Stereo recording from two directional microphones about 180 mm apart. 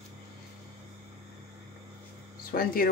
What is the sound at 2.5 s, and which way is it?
Speech, 55° left (ahead or behind).